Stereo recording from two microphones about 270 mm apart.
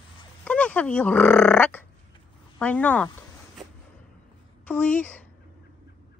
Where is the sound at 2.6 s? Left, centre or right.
Centre.